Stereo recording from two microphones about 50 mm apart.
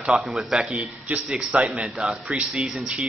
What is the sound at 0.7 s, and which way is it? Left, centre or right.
A man's voice, right.